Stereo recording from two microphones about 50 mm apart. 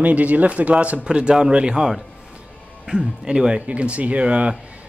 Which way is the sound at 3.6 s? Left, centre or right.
Right.